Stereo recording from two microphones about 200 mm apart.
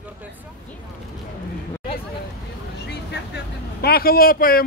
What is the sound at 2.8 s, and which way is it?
A man's voice, 55° left (ahead or behind).